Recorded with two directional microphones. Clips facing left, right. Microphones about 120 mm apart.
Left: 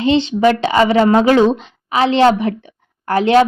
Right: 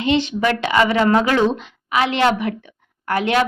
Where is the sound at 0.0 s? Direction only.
30° left (ahead or behind).